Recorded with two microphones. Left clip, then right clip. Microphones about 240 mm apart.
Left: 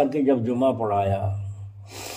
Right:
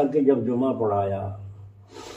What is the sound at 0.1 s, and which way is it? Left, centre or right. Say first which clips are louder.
Speech: right 1 dB; left.